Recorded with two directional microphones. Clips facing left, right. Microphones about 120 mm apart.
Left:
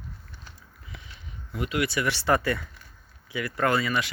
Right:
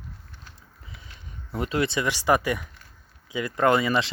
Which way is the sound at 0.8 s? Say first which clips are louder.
Left 2 dB; 30° right (ahead or behind).